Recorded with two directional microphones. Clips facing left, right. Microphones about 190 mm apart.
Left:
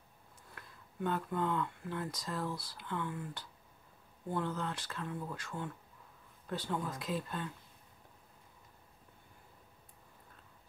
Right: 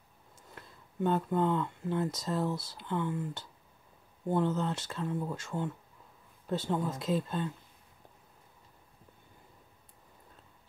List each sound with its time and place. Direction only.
0.6 s speech: 25° right (ahead or behind)